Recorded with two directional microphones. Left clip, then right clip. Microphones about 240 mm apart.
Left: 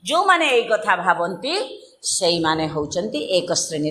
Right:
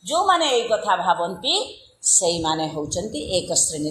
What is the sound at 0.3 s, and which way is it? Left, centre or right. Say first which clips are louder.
Speech: left 2 dB; left.